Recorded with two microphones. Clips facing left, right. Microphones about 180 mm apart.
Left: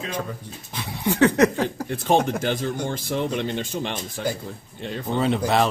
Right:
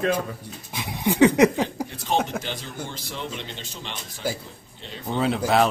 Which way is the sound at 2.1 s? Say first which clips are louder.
Left 5 dB; 50° left (ahead or behind).